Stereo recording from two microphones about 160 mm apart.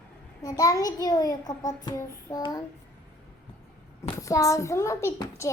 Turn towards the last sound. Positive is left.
turn(degrees=20)  # may be behind; listen again after turning